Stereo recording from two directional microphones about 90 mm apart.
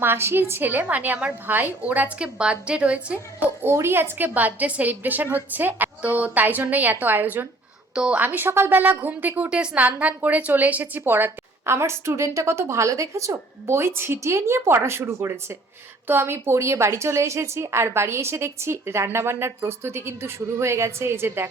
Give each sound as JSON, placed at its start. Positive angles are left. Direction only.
{"t": 0.0, "sound": "a woman's voice", "side_deg": -25}
{"t": 3.6, "sound": "a woman's voice", "side_deg": -30}